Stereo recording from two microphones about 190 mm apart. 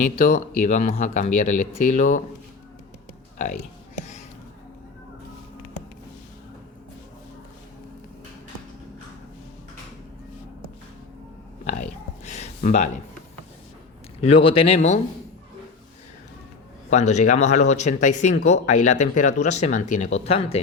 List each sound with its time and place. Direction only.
0.0 s speech: 40° left (ahead or behind)
3.3 s speech: 40° left (ahead or behind)
11.6 s a sound: 40° left (ahead or behind)
14.3 s speech: 30° left (ahead or behind)
16.9 s speech: 40° left (ahead or behind)